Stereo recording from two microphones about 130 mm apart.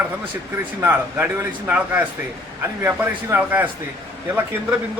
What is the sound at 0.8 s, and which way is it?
Speech, 15° right (ahead or behind).